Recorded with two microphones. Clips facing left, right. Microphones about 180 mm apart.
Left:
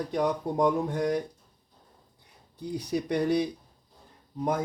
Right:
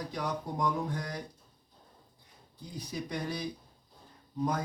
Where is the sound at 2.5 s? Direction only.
70° left (ahead or behind).